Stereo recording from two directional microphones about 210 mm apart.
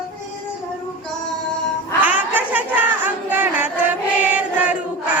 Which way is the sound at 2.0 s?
10° right (ahead or behind).